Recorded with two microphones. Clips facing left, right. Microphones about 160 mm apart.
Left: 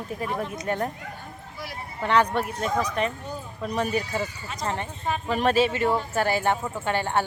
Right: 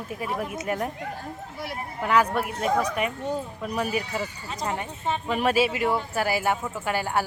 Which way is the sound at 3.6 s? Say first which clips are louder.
Left 5 dB; 5° right (ahead or behind).